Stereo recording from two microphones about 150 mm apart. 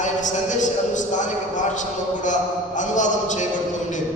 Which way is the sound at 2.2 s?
55° left (ahead or behind).